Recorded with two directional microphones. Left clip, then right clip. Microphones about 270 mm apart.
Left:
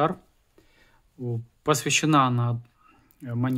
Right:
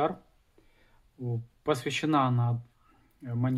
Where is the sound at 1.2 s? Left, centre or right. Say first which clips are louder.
Left 5 dB; left.